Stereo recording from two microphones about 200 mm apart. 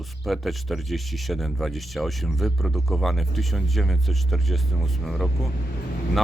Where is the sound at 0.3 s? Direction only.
Centre (ahead or behind).